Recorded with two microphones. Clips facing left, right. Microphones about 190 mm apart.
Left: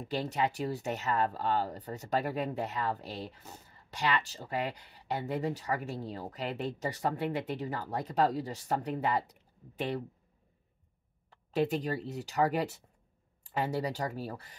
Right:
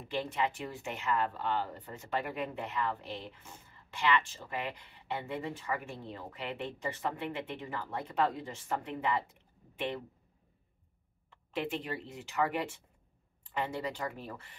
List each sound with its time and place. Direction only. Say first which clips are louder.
0.0 s speech: left 2 dB; 40° left (ahead or behind)
11.2 s speech: left 6 dB; 40° left (ahead or behind)